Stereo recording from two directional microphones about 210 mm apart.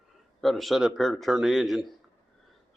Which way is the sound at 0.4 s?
Centre (ahead or behind).